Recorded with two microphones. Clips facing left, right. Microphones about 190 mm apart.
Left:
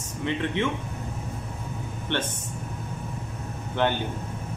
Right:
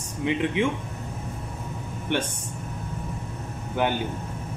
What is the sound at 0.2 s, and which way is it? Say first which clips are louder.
Speech: right 3 dB; 10° right (ahead or behind).